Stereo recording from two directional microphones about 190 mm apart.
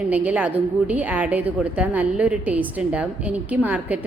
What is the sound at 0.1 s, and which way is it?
A woman's voice, 5° right (ahead or behind).